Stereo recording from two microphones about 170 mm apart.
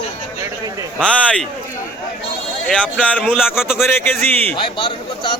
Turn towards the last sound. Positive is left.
turn(degrees=30)  # may be behind; listen again after turning